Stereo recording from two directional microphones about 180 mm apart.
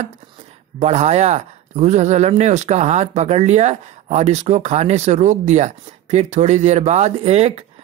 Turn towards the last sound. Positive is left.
turn(degrees=-35)  # may be behind; listen again after turning